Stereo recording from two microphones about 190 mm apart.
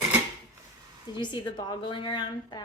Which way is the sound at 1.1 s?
25° left (ahead or behind).